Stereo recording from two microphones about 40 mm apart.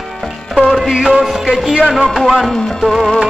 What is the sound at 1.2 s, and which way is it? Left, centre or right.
Speech, centre.